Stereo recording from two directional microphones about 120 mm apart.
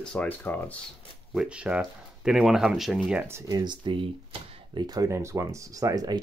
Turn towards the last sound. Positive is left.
turn(degrees=-35)  # may be behind; listen again after turning